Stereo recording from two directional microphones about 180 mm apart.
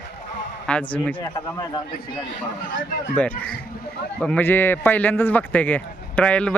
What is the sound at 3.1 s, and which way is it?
Speech, 10° left (ahead or behind).